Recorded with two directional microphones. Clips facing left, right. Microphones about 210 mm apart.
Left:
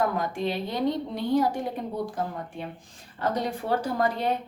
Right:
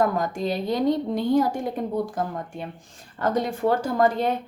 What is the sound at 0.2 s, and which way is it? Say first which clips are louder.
Speech: right 3 dB; 40° right (ahead or behind).